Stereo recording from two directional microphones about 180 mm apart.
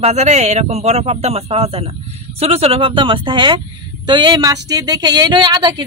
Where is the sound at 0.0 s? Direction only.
40° right (ahead or behind).